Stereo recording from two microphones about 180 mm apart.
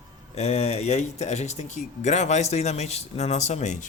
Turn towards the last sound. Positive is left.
turn(degrees=40)  # may be behind; listen again after turning